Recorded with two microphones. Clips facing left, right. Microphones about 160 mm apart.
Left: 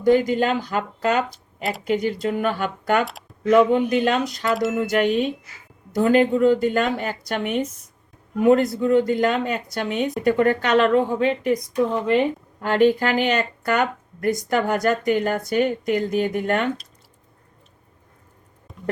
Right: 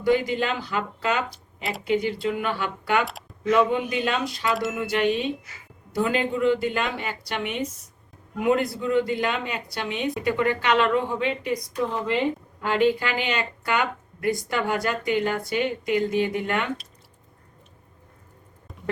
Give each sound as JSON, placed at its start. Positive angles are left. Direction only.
{"t": 0.0, "sound": "speech", "side_deg": 45}
{"t": 3.0, "sound": "speech", "side_deg": 0}
{"t": 3.4, "sound": "speech", "side_deg": 45}
{"t": 4.5, "sound": "speech", "side_deg": 0}
{"t": 4.8, "sound": "speech", "side_deg": 45}
{"t": 12.6, "sound": "speech", "side_deg": 45}
{"t": 18.7, "sound": "a sound", "side_deg": 0}